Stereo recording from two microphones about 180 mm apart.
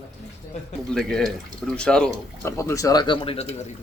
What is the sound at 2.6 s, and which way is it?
Speech, 15° left (ahead or behind).